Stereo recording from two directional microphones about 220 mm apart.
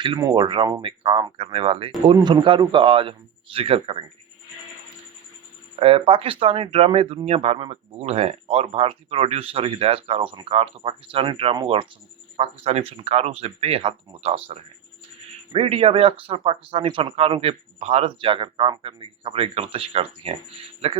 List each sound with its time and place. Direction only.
0.0 s speech: 20° right (ahead or behind)
5.8 s speech: 25° right (ahead or behind)